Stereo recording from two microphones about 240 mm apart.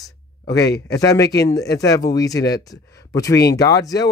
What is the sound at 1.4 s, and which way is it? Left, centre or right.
Speech, left.